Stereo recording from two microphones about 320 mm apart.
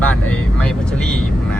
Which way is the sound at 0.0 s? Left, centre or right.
Centre.